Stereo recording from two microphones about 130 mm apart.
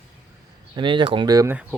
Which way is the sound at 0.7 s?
40° right (ahead or behind).